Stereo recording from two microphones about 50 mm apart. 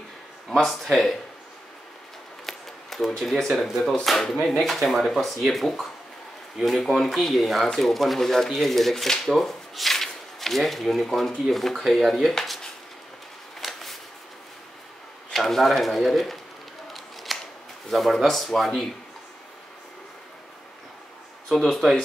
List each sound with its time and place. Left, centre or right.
0.5 s speech: centre
2.4 s camera: centre
3.8 s speech: centre
13.6 s a sound: centre
15.3 s speech: centre
16.9 s scissors: centre
17.8 s speech: centre
21.5 s speech: centre